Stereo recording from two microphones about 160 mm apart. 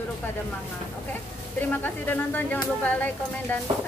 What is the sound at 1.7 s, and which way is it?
Speech, 10° left (ahead or behind).